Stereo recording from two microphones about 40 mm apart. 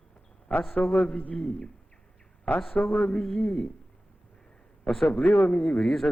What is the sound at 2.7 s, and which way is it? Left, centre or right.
Speech, left.